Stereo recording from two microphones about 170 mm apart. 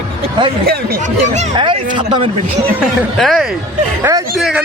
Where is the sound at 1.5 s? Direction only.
30° right (ahead or behind).